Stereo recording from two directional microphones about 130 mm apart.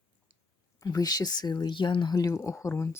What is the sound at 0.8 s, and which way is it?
Speech, 25° left (ahead or behind).